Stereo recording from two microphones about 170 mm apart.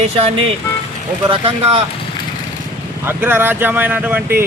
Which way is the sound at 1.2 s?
30° right (ahead or behind).